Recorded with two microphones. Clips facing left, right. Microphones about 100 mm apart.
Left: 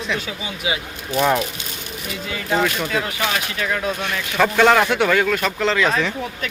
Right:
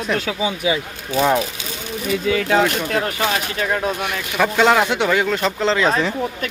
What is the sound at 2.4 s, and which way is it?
Speech, 90° right.